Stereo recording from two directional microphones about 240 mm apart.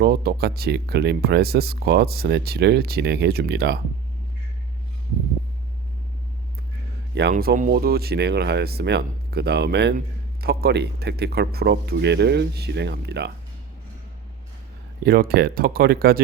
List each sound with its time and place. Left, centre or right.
0.0 s speech: right
7.1 s speech: right
15.0 s speech: right